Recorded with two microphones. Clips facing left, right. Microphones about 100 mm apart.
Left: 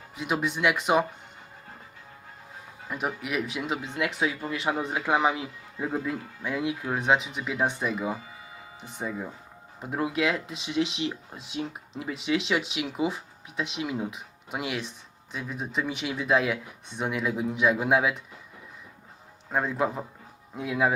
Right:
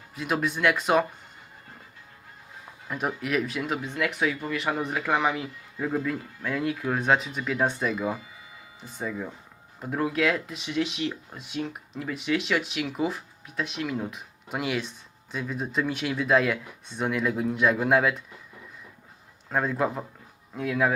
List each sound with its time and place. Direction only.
0.2 s speech: 15° left (ahead or behind)
3.2 s speech: 5° left (ahead or behind)
12.7 s speech: 10° left (ahead or behind)
19.5 s a man's voice: 5° left (ahead or behind)